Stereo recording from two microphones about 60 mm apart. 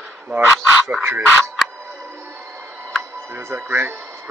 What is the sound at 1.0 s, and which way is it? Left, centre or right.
Speech, right.